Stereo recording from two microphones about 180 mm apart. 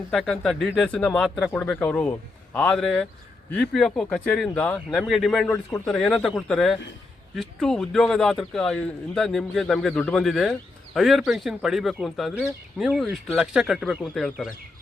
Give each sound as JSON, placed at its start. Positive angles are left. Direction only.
{"t": 0.1, "sound": "speech", "side_deg": 5}